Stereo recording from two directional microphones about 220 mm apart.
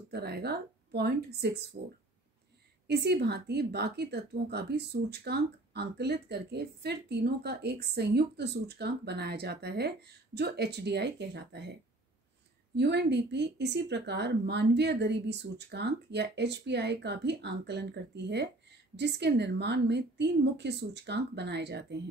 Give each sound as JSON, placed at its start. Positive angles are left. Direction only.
{"t": 0.1, "sound": "a woman's voice", "side_deg": -45}
{"t": 2.9, "sound": "a woman's voice", "side_deg": -50}
{"t": 12.7, "sound": "a woman's voice", "side_deg": -50}